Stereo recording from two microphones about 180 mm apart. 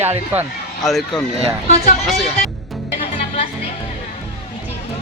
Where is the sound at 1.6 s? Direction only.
40° left (ahead or behind).